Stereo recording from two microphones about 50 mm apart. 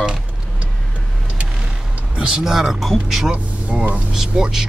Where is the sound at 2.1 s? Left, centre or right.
Centre.